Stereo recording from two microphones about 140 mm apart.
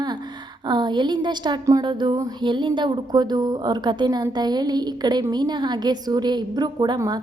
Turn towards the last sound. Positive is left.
turn(degrees=-30)  # may be behind; listen again after turning